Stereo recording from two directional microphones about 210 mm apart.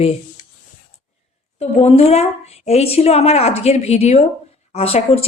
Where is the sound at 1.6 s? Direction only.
30° left (ahead or behind).